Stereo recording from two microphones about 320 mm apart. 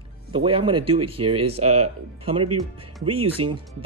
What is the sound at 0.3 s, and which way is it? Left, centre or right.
Speech, centre.